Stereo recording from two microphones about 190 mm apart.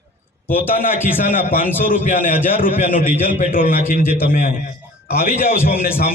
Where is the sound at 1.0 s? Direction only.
45° left (ahead or behind).